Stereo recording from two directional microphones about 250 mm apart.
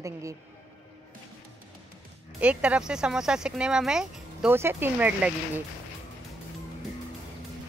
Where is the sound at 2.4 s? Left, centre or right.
Centre.